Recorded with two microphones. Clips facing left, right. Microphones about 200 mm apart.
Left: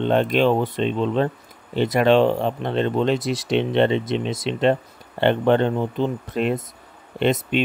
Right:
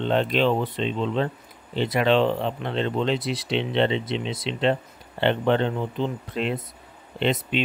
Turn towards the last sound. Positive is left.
turn(degrees=50)  # may be behind; listen again after turning